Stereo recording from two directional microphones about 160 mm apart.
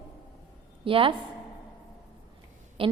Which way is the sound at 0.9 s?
35° right (ahead or behind).